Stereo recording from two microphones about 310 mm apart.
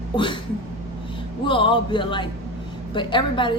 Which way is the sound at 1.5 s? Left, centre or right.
Centre.